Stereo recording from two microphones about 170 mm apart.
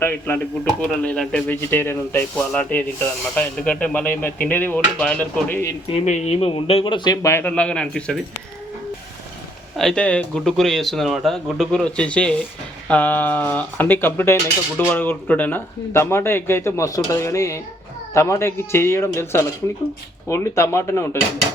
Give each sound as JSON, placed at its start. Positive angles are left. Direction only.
{"t": 0.0, "sound": "speech", "side_deg": 10}
{"t": 5.9, "sound": "speech", "side_deg": 40}
{"t": 9.7, "sound": "speech", "side_deg": 5}